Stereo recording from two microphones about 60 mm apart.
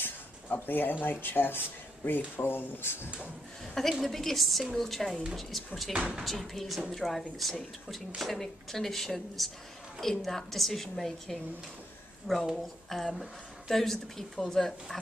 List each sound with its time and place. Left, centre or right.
0.0 s a sound: left
1.0 s speech: left
3.9 s a woman's voice: centre
5.9 s speech: centre
6.2 s a woman's voice: centre